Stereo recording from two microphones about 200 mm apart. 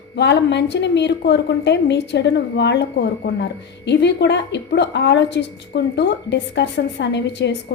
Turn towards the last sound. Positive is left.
turn(degrees=60)  # may be behind; listen again after turning